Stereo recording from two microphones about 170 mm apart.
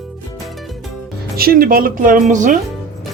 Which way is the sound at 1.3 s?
60° right (ahead or behind).